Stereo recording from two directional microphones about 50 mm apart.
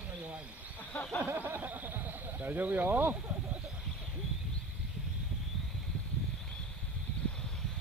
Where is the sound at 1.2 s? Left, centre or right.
Right.